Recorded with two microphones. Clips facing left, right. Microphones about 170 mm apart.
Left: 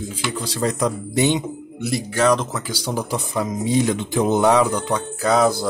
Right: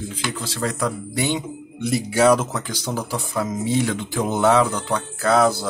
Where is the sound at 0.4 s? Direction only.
20° left (ahead or behind).